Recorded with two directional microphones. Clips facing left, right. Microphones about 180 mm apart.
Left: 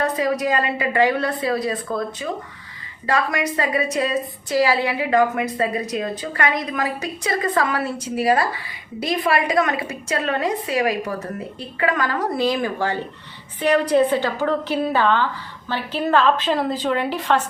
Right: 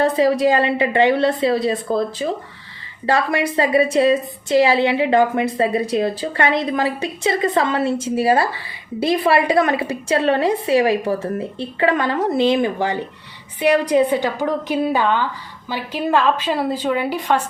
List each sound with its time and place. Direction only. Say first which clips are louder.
0.0 s a woman's voice: right 6 dB; 30° right (ahead or behind); by 17.4 s 10° right (ahead or behind)